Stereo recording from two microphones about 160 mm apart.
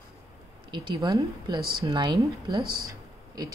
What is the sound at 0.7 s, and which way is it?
A woman's voice, 25° right (ahead or behind).